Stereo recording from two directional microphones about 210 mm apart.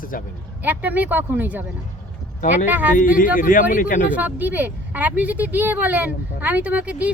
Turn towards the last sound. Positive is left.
turn(degrees=-5)  # may be behind; listen again after turning